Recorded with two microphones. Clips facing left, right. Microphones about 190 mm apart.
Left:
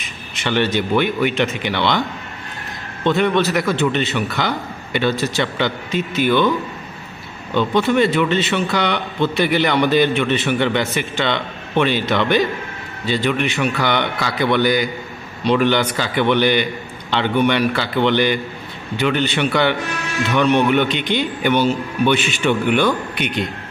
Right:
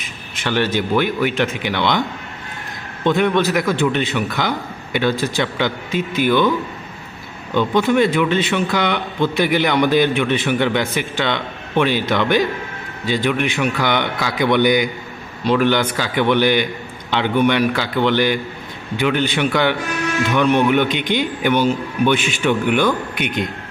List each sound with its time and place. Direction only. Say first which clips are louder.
0.4 s a man's voice: even; 5° right (ahead or behind)
7.5 s a man's voice: right 1 dB; 10° right (ahead or behind)
23.1 s a man's voice: even; 55° right (ahead or behind)